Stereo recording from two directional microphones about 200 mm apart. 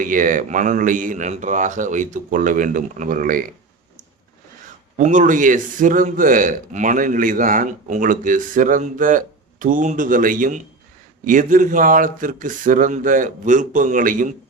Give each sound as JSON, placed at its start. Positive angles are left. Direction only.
{"t": 0.0, "sound": "speech", "side_deg": -40}
{"t": 4.9, "sound": "speech", "side_deg": -40}